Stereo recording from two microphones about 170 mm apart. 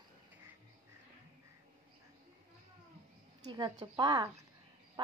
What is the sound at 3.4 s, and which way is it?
Speech, 25° right (ahead or behind).